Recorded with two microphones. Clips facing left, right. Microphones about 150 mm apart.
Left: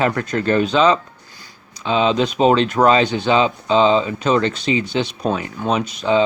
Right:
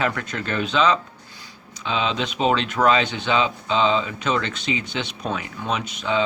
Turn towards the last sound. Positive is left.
turn(degrees=35)  # may be behind; listen again after turning